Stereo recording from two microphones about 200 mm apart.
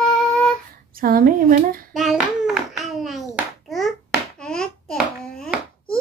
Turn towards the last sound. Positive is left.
turn(degrees=0)  # may be behind; listen again after turning